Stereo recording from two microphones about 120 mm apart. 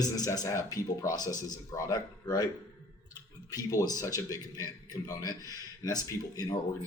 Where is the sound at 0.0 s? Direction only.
30° left (ahead or behind).